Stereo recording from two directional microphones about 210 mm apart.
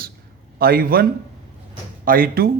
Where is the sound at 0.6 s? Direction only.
45° right (ahead or behind).